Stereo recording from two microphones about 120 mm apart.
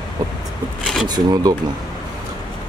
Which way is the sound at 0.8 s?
5° left (ahead or behind).